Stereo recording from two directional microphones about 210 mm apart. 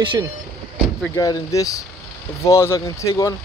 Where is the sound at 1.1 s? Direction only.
15° left (ahead or behind).